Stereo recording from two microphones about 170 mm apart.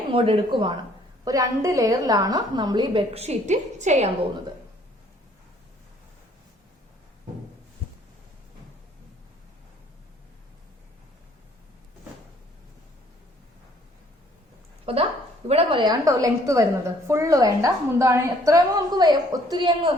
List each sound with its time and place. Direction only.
0.1 s speech: 30° right (ahead or behind)
1.2 s a woman's voice: 20° right (ahead or behind); by 4.3 s 40° right (ahead or behind)
14.9 s a sound: 35° right (ahead or behind)
15.4 s a woman's voice: 30° right (ahead or behind)